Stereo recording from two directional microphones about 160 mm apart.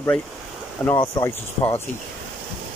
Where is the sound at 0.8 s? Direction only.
5° right (ahead or behind).